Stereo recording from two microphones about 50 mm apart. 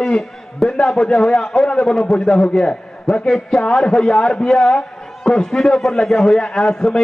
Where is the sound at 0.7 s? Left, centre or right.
Centre.